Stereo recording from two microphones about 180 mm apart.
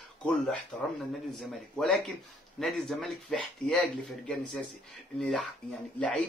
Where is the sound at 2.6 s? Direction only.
Centre (ahead or behind).